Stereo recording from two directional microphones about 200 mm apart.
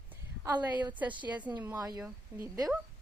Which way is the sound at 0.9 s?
10° right (ahead or behind).